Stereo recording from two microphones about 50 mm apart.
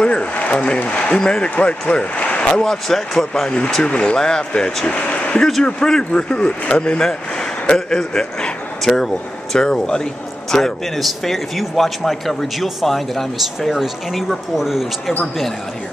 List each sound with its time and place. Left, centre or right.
0.0 s a man's voice: left
2.7 s speech: centre
3.8 s a man's voice: centre
4.8 s a sound: left
5.9 s a man's voice: centre
10.5 s speech: centre